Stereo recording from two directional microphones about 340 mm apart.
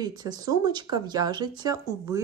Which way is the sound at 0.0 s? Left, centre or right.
Centre.